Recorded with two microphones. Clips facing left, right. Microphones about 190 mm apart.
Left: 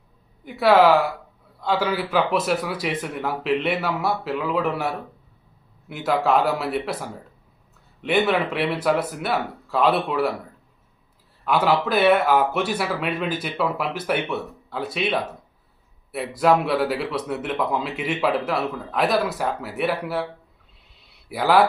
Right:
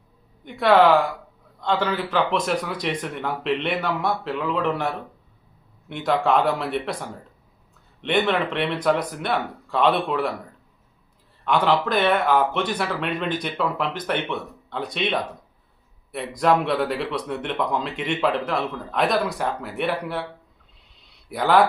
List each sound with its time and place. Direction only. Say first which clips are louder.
0.4 s speech: left 1 dB; 5° left (ahead or behind)
11.4 s speech: even; 5° left (ahead or behind)
21.2 s a man's voice: even; 5° left (ahead or behind)